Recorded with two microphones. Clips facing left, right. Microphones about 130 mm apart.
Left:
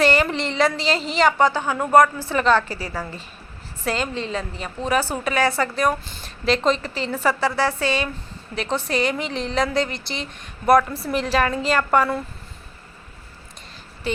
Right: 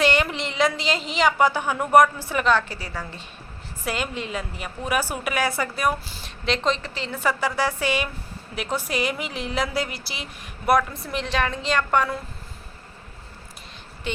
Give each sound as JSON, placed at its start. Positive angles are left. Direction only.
{"t": 0.0, "sound": "a woman's voice", "side_deg": 0}
{"t": 1.5, "sound": "a woman's voice", "side_deg": -15}
{"t": 2.3, "sound": "a woman's voice", "side_deg": -5}
{"t": 3.8, "sound": "a woman's voice", "side_deg": -10}
{"t": 7.5, "sound": "a woman's voice", "side_deg": -15}